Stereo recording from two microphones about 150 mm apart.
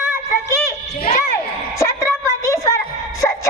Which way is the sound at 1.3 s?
20° left (ahead or behind).